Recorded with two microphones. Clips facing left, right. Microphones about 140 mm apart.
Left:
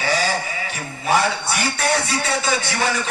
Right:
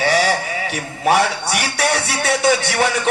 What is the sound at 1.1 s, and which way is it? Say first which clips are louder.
Music: right 3 dB; 70° right (ahead or behind).